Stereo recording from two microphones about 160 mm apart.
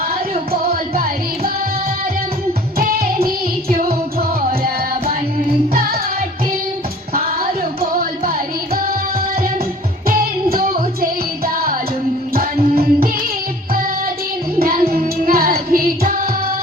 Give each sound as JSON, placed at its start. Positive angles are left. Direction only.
{"t": 0.5, "sound": "music", "side_deg": -70}
{"t": 2.7, "sound": "music", "side_deg": -70}
{"t": 7.1, "sound": "music", "side_deg": -65}
{"t": 10.1, "sound": "music", "side_deg": -65}
{"t": 14.6, "sound": "music", "side_deg": -70}